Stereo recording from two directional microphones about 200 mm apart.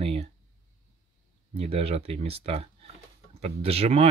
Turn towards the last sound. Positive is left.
turn(degrees=-30)  # may be behind; listen again after turning